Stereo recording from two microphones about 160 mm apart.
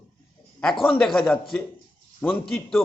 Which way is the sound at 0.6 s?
5° left (ahead or behind).